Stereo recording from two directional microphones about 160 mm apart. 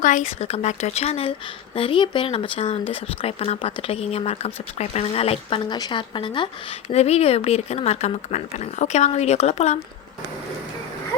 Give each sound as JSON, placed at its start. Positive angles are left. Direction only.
{"t": 0.0, "sound": "speech", "side_deg": 55}
{"t": 0.3, "sound": "speech", "side_deg": 40}